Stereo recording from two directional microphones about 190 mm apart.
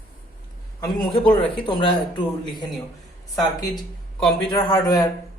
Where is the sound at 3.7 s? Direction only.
Centre (ahead or behind).